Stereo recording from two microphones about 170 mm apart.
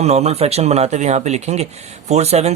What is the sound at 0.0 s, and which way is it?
Speech, 40° right (ahead or behind).